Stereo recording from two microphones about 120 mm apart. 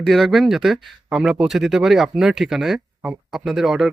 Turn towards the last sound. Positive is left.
turn(degrees=-5)  # may be behind; listen again after turning